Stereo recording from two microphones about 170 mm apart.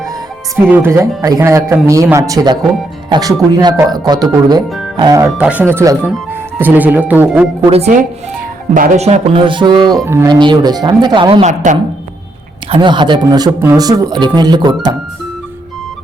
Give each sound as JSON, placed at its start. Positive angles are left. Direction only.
{"t": 0.7, "sound": "speech", "side_deg": -15}
{"t": 5.4, "sound": "speech", "side_deg": -10}
{"t": 7.7, "sound": "speech", "side_deg": -40}
{"t": 11.4, "sound": "speech", "side_deg": -45}
{"t": 12.7, "sound": "speech", "side_deg": -30}